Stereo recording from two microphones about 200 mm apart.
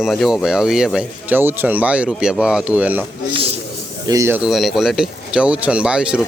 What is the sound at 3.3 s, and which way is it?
Speech, 25° right (ahead or behind).